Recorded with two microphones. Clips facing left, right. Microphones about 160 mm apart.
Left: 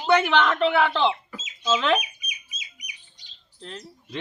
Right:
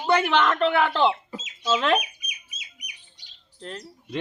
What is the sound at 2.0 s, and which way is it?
Bird, 60° right (ahead or behind).